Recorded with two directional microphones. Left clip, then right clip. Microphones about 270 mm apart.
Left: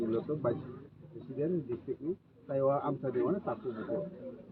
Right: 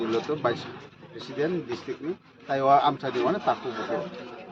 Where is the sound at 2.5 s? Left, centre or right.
Centre.